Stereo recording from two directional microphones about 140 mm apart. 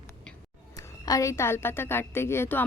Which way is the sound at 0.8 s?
25° left (ahead or behind).